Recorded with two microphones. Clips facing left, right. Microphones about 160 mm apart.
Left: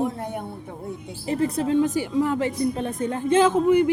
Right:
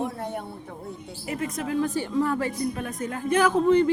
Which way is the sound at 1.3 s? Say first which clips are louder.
Left 7 dB; 30° left (ahead or behind).